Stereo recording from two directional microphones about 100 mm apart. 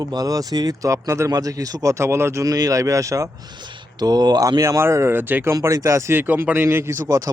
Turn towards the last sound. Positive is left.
turn(degrees=-35)  # may be behind; listen again after turning